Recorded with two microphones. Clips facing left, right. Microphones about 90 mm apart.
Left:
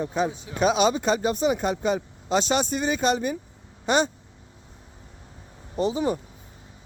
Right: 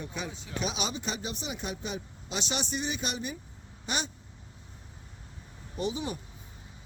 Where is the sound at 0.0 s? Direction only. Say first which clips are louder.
Left 12 dB; 40° left (ahead or behind).